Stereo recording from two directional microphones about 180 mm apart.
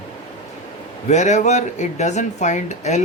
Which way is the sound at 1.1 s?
40° left (ahead or behind).